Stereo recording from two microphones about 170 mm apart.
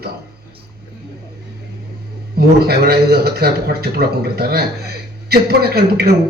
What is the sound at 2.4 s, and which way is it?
A man's voice, 65° right (ahead or behind).